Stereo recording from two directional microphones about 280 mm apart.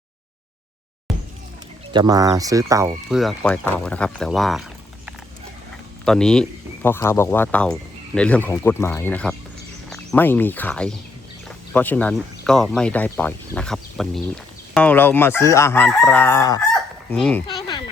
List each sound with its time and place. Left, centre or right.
1.1 s basketball bounce: centre
1.9 s speech: centre
6.1 s speech: centre
16.7 s fowl: centre
17.4 s a sound: centre